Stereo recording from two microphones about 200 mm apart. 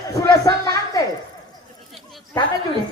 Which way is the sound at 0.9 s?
15° left (ahead or behind).